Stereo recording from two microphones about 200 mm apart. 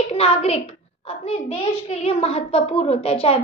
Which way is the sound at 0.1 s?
30° left (ahead or behind).